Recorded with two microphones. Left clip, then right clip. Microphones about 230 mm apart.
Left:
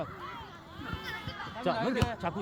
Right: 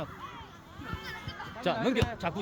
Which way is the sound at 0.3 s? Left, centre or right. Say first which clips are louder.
Left 3 dB; left.